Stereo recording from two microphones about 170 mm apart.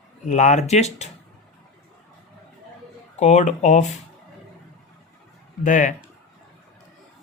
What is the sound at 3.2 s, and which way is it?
Speech, 45° left (ahead or behind).